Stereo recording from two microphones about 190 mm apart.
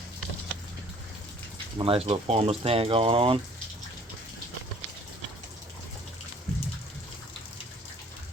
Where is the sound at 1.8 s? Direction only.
30° right (ahead or behind).